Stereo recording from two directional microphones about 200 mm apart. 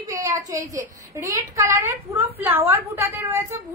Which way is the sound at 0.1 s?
15° right (ahead or behind).